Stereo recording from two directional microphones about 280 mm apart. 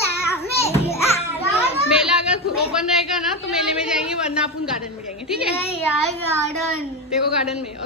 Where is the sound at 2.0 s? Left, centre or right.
Centre.